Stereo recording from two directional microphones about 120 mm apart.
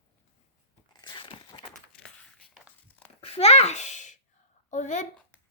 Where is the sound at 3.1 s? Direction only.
55° left (ahead or behind); by 5.0 s 90° left.